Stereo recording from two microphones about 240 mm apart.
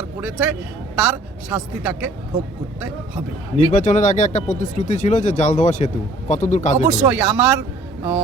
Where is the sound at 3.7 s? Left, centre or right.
Left.